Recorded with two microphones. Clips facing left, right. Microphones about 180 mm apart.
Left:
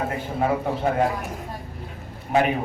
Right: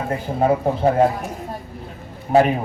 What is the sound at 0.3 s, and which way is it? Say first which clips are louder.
Speech: right 5 dB; 35° right (ahead or behind).